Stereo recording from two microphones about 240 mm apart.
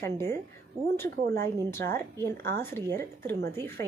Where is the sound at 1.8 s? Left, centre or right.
Right.